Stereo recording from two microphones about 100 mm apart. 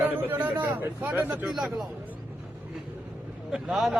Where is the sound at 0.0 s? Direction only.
20° right (ahead or behind).